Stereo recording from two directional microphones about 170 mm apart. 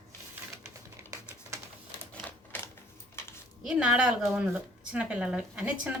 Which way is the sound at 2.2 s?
10° left (ahead or behind).